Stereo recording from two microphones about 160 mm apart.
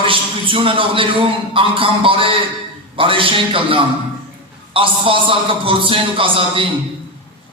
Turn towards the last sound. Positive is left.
turn(degrees=-35)  # may be behind; listen again after turning